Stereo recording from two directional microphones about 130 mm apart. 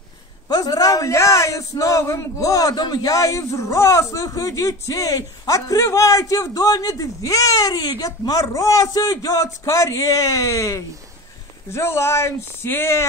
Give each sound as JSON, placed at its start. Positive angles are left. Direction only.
{"t": 0.5, "sound": "a man's voice", "side_deg": 30}